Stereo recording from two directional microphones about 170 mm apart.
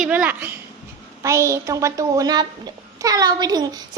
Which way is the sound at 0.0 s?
10° right (ahead or behind).